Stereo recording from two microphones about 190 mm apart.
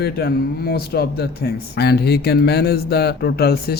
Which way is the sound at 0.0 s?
55° left (ahead or behind).